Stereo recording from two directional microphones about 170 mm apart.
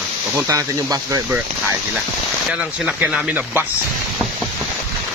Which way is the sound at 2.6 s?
5° right (ahead or behind).